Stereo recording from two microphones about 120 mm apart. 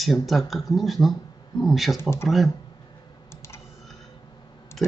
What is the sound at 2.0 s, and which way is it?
Speech, 20° left (ahead or behind).